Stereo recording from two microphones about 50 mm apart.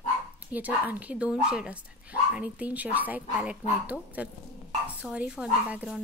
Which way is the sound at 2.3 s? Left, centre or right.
Right.